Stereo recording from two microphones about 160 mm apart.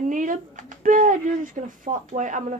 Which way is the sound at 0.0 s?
55° right (ahead or behind).